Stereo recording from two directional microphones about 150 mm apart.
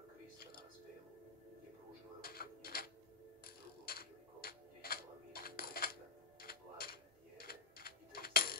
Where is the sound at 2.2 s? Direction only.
80° left.